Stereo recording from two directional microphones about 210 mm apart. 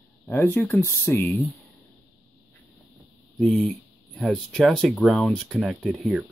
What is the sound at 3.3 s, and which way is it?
Speech, centre (ahead or behind).